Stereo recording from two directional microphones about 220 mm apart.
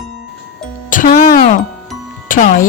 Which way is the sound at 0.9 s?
35° left (ahead or behind).